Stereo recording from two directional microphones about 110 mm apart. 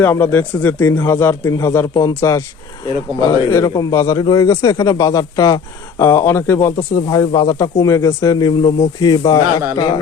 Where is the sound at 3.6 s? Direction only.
35° left (ahead or behind).